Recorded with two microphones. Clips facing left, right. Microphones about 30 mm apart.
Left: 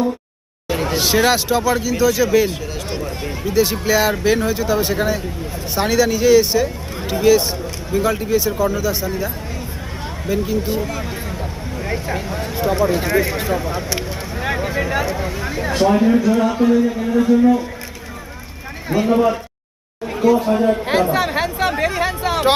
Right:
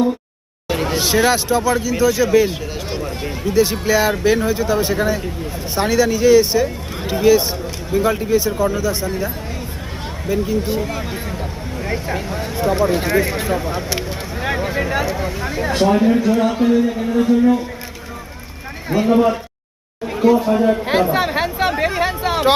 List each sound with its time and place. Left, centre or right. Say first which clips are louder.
0.7 s a sound: even; centre
1.0 s a man's voice: even; centre
10.3 s a man's voice: right 1 dB; centre
18.9 s speech: right 1 dB; centre
20.5 s speech: right 1 dB; centre
21.7 s hubbub: right 1 dB; centre